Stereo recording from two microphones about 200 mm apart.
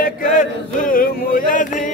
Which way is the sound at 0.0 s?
40° left (ahead or behind).